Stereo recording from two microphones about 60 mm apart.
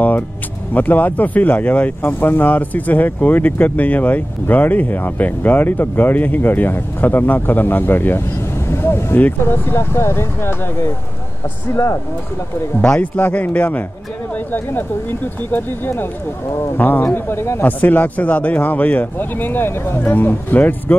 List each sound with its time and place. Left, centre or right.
0.7 s speech: left
13.0 s a man's voice: left
17.0 s speech: left
17.6 s a man's voice: left